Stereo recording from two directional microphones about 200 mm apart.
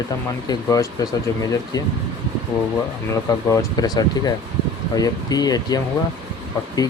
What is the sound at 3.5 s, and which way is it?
Speech, 20° left (ahead or behind).